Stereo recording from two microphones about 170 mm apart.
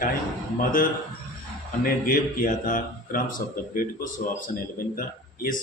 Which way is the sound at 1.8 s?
55° left (ahead or behind).